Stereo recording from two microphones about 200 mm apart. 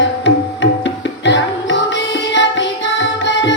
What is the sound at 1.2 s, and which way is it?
Music, 60° left (ahead or behind).